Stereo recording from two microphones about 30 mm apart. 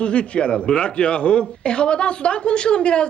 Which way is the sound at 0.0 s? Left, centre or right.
Left.